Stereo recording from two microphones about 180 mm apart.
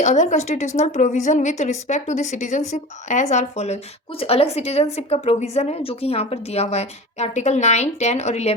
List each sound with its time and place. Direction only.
0.0 s a woman's voice: 40° left (ahead or behind)